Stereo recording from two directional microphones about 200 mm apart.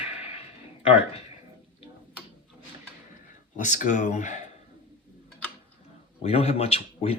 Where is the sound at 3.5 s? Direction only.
40° left (ahead or behind).